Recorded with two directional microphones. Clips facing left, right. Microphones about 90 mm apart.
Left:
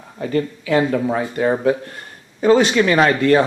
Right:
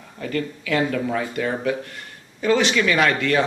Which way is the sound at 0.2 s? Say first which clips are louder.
Left 5 dB; 25° left (ahead or behind).